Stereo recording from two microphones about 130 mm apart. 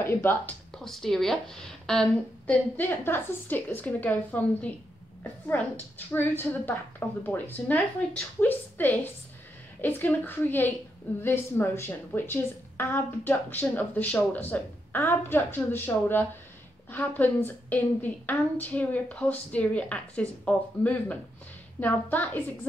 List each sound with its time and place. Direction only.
0.0 s a woman's voice: 15° left (ahead or behind)
0.8 s a woman's voice: 5° left (ahead or behind)